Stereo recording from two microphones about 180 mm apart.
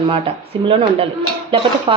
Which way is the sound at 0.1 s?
30° right (ahead or behind).